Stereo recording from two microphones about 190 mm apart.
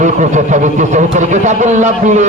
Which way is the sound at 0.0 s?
40° right (ahead or behind).